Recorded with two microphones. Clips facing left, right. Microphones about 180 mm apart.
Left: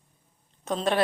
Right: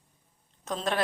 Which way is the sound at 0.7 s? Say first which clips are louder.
Left 4 dB; centre (ahead or behind).